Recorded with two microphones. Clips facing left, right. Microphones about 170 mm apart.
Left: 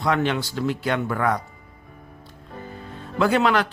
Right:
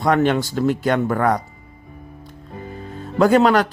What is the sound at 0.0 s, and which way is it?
Speech, 45° right (ahead or behind).